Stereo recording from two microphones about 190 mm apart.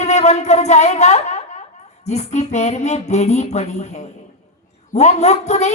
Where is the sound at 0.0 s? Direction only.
35° left (ahead or behind).